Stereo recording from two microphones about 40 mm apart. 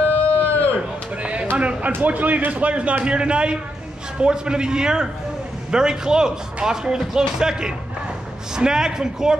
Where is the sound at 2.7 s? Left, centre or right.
Right.